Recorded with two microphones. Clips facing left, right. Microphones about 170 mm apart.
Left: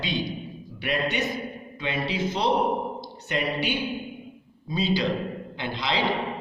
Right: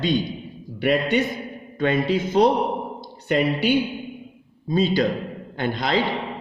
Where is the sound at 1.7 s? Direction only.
50° right (ahead or behind).